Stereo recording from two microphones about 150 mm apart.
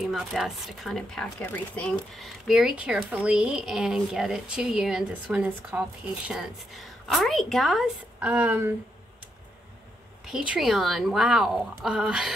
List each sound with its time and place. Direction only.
0.0 s a woman's voice: centre (ahead or behind)
10.3 s a woman's voice: 5° right (ahead or behind)